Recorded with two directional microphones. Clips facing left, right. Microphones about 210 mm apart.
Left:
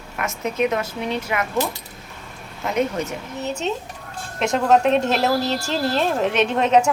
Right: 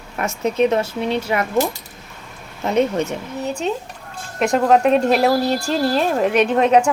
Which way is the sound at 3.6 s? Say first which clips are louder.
Right 2 dB; 5° right (ahead or behind).